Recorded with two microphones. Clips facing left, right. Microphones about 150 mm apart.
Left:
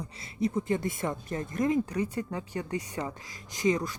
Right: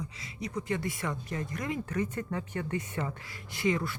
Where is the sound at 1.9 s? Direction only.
15° left (ahead or behind).